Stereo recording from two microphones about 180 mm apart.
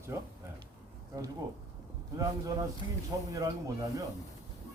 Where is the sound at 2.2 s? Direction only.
20° right (ahead or behind).